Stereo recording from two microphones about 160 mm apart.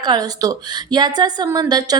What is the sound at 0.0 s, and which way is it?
A woman's voice, 25° right (ahead or behind).